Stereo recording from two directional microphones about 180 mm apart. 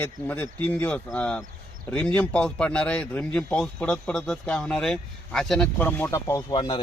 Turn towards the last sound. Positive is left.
turn(degrees=25)  # may be behind; listen again after turning